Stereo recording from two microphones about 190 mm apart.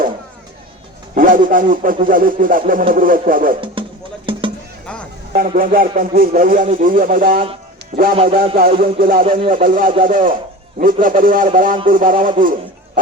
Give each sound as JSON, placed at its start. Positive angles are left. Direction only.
{"t": 1.1, "sound": "speech", "side_deg": -45}
{"t": 3.8, "sound": "music", "side_deg": -25}
{"t": 5.3, "sound": "speech", "side_deg": -45}
{"t": 8.5, "sound": "speech", "side_deg": -50}